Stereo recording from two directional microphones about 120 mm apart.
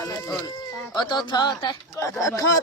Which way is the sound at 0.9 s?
35° left (ahead or behind).